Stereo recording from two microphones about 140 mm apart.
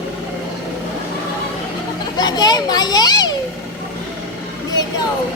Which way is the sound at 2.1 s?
30° left (ahead or behind).